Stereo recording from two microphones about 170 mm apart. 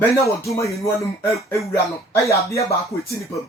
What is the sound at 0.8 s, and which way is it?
Speech, 15° left (ahead or behind).